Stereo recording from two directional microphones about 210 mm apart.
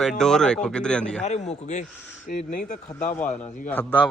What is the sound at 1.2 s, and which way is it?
Speech, 35° left (ahead or behind).